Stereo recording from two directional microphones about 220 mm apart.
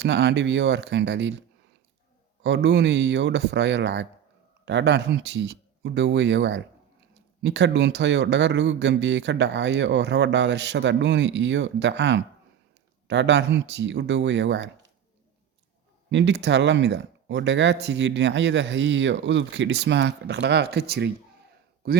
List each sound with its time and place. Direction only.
0.0 s speech: 50° right (ahead or behind)
2.4 s speech: 50° right (ahead or behind)
16.0 s speech: 55° right (ahead or behind)